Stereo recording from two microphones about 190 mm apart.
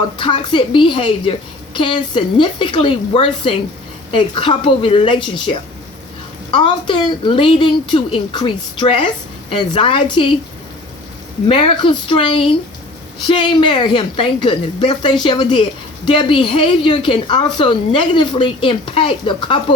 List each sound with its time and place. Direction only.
0.2 s a woman's voice: 25° left (ahead or behind)
11.4 s a woman's voice: 25° left (ahead or behind)